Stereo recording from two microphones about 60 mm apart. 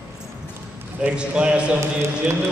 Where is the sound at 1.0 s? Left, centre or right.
Centre.